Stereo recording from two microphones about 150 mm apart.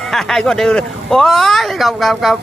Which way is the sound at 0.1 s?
5° left (ahead or behind).